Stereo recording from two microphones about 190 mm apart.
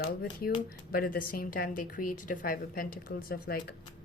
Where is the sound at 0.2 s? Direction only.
50° left (ahead or behind).